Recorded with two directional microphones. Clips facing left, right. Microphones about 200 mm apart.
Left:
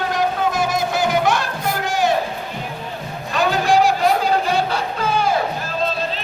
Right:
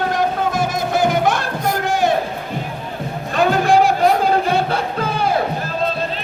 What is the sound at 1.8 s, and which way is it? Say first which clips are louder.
Crowd: right 1 dB; 55° right (ahead or behind).